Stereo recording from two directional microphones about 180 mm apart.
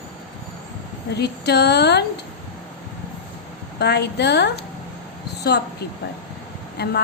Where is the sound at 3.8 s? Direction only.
65° left (ahead or behind).